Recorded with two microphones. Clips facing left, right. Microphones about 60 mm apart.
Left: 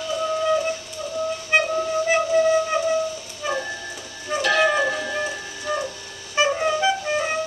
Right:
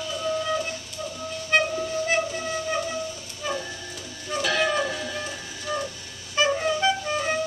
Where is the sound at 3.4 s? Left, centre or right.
Centre.